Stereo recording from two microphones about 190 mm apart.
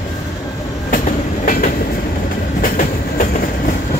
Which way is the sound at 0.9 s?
45° left (ahead or behind).